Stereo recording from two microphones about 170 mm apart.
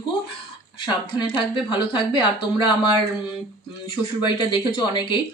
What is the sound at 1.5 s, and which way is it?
A woman's voice, 25° left (ahead or behind).